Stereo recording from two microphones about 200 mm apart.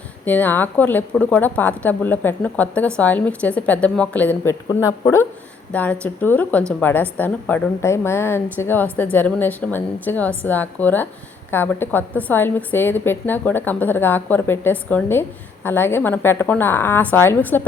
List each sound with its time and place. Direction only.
0.3 s a woman's voice: 10° left (ahead or behind)